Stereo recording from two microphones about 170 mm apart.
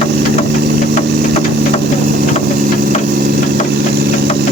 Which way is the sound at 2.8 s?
65° right (ahead or behind).